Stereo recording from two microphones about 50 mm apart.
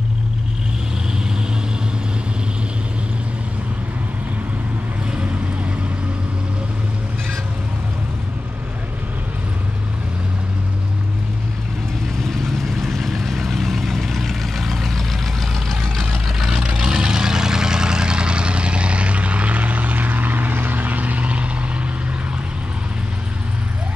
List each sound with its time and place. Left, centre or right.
5.1 s boat: right
12.2 s vehicle: centre
15.8 s vehicle: centre; by 21.5 s right